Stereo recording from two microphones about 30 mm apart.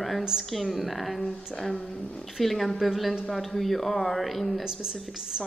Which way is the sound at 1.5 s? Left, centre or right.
Left.